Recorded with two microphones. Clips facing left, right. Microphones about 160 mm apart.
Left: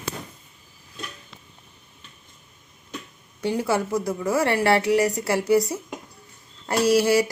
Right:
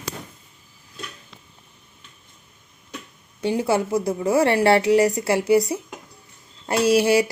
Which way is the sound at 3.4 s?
25° right (ahead or behind).